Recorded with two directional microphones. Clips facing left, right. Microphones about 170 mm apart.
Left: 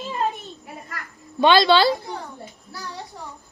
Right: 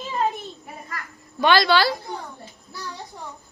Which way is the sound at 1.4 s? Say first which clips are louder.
Left 3 dB; 20° left (ahead or behind).